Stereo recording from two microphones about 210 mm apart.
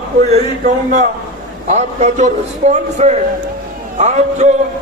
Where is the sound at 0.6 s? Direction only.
35° right (ahead or behind).